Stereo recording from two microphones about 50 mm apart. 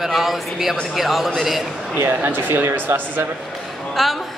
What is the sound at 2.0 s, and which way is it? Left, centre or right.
Speech, right.